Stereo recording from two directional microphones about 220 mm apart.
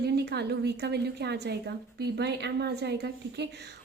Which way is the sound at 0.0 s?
50° right (ahead or behind).